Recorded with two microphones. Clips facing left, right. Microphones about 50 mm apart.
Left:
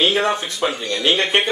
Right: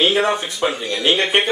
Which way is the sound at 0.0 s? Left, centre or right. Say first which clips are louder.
Right 1 dB; centre.